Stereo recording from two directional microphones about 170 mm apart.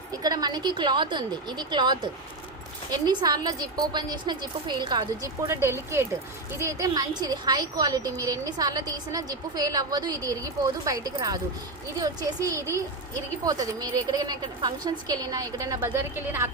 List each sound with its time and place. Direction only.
0.1 s a woman's voice: 20° right (ahead or behind)